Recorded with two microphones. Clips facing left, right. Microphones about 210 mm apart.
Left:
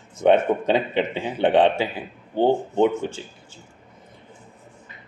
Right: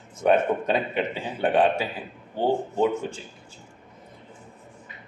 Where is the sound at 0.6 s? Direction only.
90° left.